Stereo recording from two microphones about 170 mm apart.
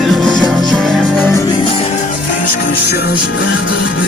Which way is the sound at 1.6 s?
35° left (ahead or behind).